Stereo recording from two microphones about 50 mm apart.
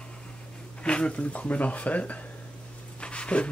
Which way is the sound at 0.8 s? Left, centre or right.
Left.